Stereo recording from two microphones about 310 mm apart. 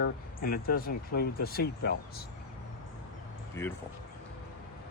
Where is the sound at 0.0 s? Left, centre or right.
Left.